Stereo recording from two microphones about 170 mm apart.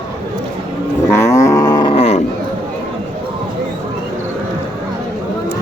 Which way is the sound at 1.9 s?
35° left (ahead or behind).